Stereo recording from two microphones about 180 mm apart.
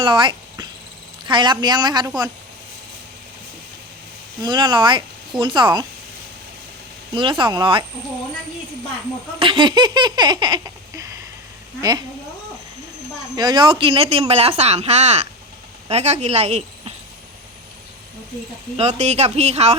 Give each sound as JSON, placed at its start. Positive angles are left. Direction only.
{"t": 0.0, "sound": "a sound", "side_deg": -25}
{"t": 1.2, "sound": "speech", "side_deg": -25}
{"t": 4.4, "sound": "speech", "side_deg": -25}
{"t": 7.1, "sound": "speech", "side_deg": -25}
{"t": 9.4, "sound": "speech", "side_deg": -25}
{"t": 13.3, "sound": "speech", "side_deg": -25}
{"t": 18.8, "sound": "speech", "side_deg": -40}